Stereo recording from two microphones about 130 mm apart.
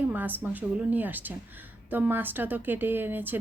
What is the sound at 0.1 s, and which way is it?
Speech, 15° right (ahead or behind).